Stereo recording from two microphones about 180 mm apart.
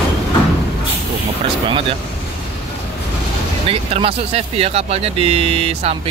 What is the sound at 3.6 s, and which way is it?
Speech, 35° right (ahead or behind).